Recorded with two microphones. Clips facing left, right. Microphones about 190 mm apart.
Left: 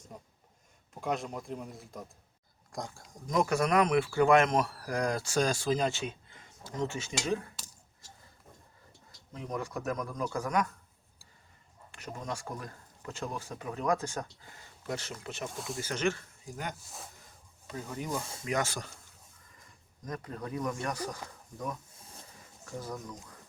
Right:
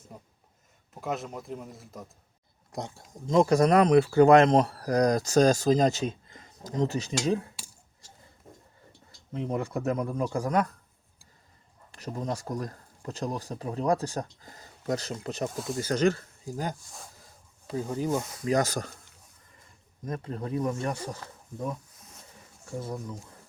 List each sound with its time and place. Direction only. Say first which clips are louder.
1.0 s speech: right 1 dB; centre (ahead or behind)
2.7 s speech: right 4 dB; 25° right (ahead or behind)
9.3 s speech: right 6 dB; 25° right (ahead or behind)
11.9 s speech: right 6 dB; 35° right (ahead or behind)
15.5 s speech: right 6 dB; centre (ahead or behind)
15.8 s speech: right 7 dB; 40° right (ahead or behind)
16.8 s speech: even; centre (ahead or behind)
17.7 s speech: right 8 dB; 30° right (ahead or behind)
20.1 s speech: right 5 dB; 30° right (ahead or behind)
21.9 s a sound: left 1 dB; 30° left (ahead or behind)
22.7 s speech: right 4 dB; 25° right (ahead or behind)